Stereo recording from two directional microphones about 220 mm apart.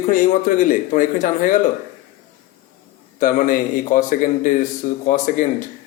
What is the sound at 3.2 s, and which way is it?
Speech, 40° left (ahead or behind).